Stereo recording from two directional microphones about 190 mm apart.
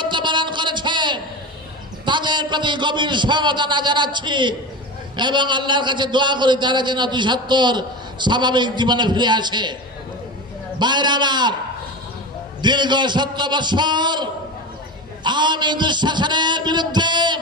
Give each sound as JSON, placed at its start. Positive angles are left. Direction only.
{"t": 0.0, "sound": "a sound", "side_deg": -25}
{"t": 2.0, "sound": "a man's voice", "side_deg": -25}
{"t": 10.8, "sound": "a man's voice", "side_deg": -25}
{"t": 12.6, "sound": "a man's voice", "side_deg": -25}